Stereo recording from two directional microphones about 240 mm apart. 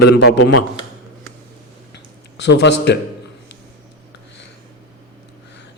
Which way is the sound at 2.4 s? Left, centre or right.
Left.